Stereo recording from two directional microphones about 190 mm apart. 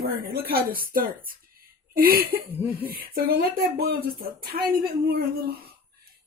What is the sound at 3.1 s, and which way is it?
Speech, 50° right (ahead or behind).